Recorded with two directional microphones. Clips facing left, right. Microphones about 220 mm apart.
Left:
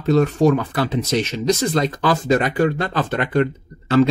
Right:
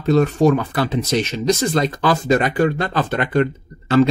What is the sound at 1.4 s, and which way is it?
Speech, 10° right (ahead or behind).